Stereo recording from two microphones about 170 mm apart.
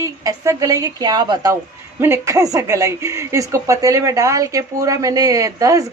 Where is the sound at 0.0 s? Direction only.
20° right (ahead or behind).